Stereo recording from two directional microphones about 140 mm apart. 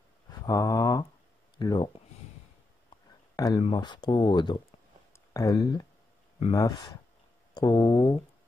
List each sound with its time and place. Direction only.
0.5 s speech: 25° left (ahead or behind)
3.3 s speech: 30° left (ahead or behind)